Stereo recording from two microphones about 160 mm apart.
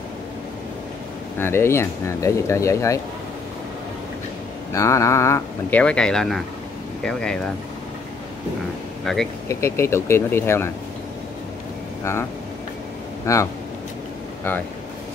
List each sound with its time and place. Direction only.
1.4 s speech: 15° left (ahead or behind)
4.7 s speech: 20° left (ahead or behind)
9.0 s speech: centre (ahead or behind)
9.5 s speech: 15° left (ahead or behind)
12.0 s speech: 15° left (ahead or behind)